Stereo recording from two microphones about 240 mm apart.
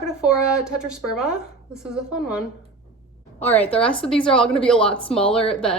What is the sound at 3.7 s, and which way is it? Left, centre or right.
Speech, left.